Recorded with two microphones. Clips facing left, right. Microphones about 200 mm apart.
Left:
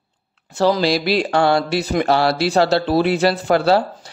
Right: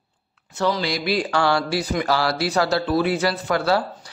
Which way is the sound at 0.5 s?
35° left (ahead or behind).